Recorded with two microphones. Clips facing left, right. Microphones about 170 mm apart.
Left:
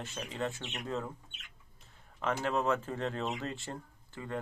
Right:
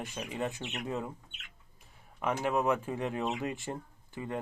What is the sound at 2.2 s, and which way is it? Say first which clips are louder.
Speech: right 2 dB; 10° right (ahead or behind).